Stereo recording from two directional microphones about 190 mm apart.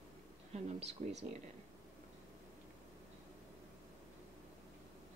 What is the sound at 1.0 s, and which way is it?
Speech, 40° right (ahead or behind).